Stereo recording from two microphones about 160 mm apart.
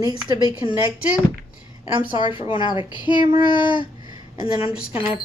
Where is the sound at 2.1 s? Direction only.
30° left (ahead or behind).